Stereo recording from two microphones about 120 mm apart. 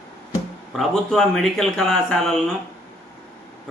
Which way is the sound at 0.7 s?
5° left (ahead or behind).